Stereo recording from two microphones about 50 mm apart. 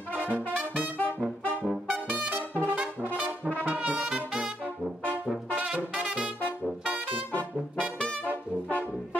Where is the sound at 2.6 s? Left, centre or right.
Right.